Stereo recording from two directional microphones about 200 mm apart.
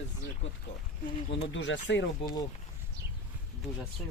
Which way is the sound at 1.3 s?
65° left (ahead or behind).